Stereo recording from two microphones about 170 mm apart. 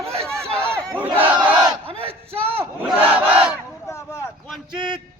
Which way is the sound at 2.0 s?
35° right (ahead or behind).